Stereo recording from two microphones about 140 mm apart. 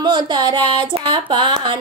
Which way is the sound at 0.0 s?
30° right (ahead or behind).